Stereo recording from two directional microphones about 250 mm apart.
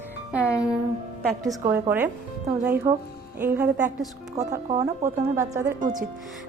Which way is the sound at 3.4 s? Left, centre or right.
Centre.